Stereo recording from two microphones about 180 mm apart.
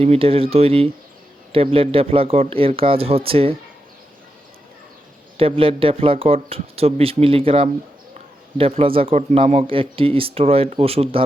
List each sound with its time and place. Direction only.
0.0 s speech: 35° right (ahead or behind)
5.4 s speech: 30° right (ahead or behind)